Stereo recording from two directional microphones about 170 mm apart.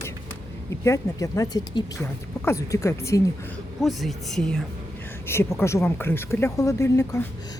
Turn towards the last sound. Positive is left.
turn(degrees=15)  # may be behind; listen again after turning